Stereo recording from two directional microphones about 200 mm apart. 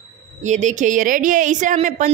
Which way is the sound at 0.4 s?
35° right (ahead or behind).